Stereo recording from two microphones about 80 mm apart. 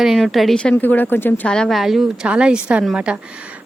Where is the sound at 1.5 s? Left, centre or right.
Centre.